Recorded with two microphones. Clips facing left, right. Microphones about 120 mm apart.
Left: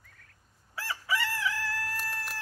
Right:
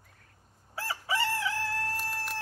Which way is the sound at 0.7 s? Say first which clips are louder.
Right 1 dB; 30° right (ahead or behind).